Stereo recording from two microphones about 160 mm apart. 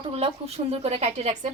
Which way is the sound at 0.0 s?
35° right (ahead or behind).